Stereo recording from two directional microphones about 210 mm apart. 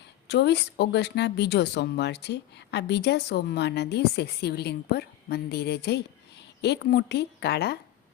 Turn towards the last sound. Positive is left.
turn(degrees=50)  # may be behind; listen again after turning